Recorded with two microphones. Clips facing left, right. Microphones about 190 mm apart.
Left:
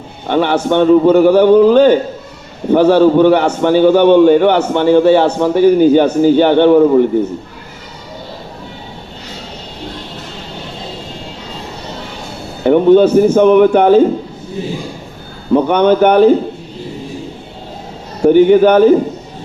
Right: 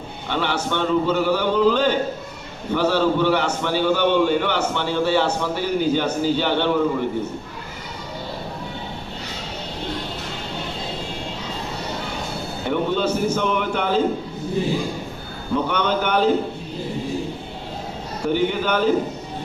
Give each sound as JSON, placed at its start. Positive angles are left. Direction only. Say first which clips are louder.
{"t": 0.3, "sound": "a man's voice", "louder": "left 11 dB", "side_deg": 55}
{"t": 12.6, "sound": "a man's voice", "louder": "left 14 dB", "side_deg": 50}
{"t": 15.5, "sound": "a man's voice", "louder": "left 12 dB", "side_deg": 55}
{"t": 18.3, "sound": "a man's voice", "louder": "left 14 dB", "side_deg": 55}